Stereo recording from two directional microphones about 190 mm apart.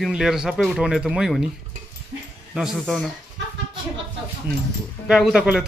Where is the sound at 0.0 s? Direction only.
5° right (ahead or behind).